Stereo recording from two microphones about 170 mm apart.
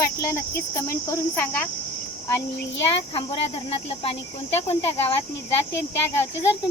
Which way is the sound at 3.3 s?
30° left (ahead or behind).